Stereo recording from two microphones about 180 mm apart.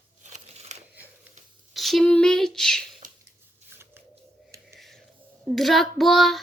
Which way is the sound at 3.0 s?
50° right (ahead or behind).